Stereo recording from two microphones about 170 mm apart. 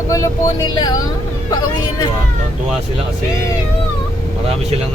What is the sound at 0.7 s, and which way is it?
Speech, 25° left (ahead or behind).